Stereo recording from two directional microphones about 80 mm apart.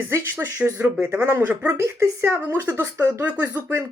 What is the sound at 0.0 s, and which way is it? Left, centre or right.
Speech, right.